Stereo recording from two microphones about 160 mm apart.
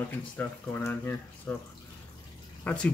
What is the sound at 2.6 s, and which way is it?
Speech, 10° left (ahead or behind).